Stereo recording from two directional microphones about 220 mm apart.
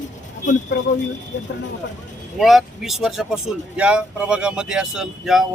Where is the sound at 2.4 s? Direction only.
Centre (ahead or behind).